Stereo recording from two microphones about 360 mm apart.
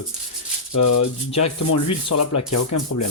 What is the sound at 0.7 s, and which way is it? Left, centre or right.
Speech, left.